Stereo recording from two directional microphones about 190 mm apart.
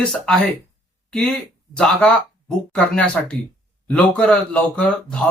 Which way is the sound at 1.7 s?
5° left (ahead or behind).